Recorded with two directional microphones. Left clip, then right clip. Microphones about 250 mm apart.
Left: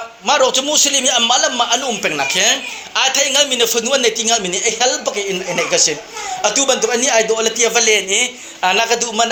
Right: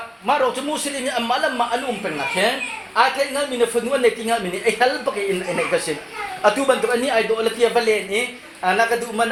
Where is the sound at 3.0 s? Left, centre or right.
Left.